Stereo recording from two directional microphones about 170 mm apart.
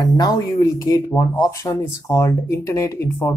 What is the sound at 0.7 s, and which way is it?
Speech, 20° left (ahead or behind).